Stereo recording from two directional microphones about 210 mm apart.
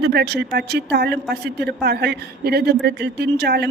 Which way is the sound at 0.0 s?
50° right (ahead or behind).